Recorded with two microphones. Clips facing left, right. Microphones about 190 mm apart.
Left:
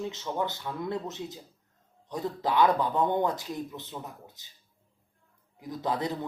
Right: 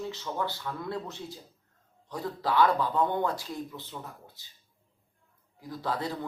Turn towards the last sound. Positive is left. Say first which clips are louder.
# left 2 dB
turn(degrees=20)  # may be behind; listen again after turning